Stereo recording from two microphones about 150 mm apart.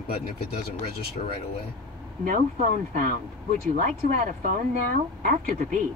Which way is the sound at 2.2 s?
65° right (ahead or behind).